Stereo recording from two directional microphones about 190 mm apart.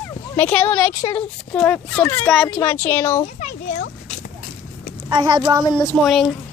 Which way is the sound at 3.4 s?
40° left (ahead or behind).